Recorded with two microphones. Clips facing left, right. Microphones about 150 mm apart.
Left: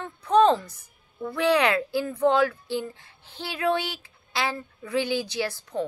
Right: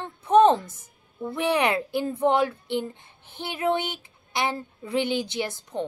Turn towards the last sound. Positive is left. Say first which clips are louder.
# left 1 dB
turn(degrees=-20)  # may be behind; listen again after turning